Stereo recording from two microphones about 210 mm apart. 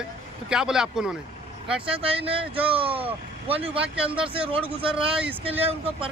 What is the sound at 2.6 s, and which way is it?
Speech, 25° right (ahead or behind).